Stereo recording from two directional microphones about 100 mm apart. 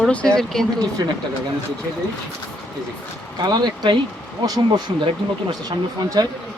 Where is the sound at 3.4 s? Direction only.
45° right (ahead or behind).